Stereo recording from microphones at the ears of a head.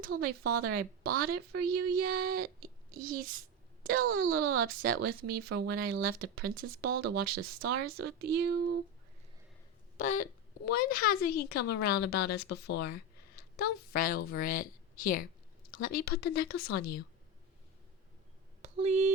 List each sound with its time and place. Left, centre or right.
0.0 s a woman's voice: right
10.0 s a woman's voice: left